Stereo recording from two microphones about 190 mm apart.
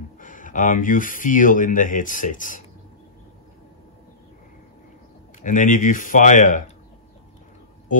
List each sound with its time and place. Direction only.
0.2 s speech: 45° left (ahead or behind)
5.4 s speech: 40° left (ahead or behind)